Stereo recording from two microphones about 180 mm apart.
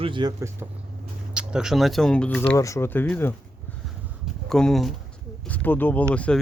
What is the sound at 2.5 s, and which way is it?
Speech, 15° left (ahead or behind).